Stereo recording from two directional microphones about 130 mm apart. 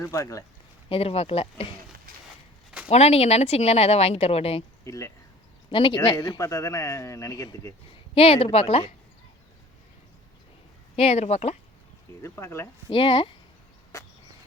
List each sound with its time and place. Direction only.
0.0 s speech: 25° left (ahead or behind)
0.9 s speech: 50° left (ahead or behind)
2.9 s speech: 55° left (ahead or behind)
4.8 s speech: 25° left (ahead or behind)
5.7 s speech: 40° left (ahead or behind)
6.1 s speech: 30° left (ahead or behind)
8.1 s speech: 50° left (ahead or behind)
10.9 s speech: 50° left (ahead or behind)
12.2 s speech: 20° left (ahead or behind)
12.9 s speech: 45° left (ahead or behind)
13.9 s a sound: 20° left (ahead or behind)